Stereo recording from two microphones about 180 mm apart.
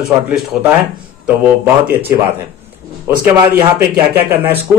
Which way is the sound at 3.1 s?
10° right (ahead or behind).